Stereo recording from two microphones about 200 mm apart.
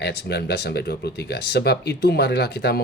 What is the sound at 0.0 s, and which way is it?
Speech, 55° left (ahead or behind).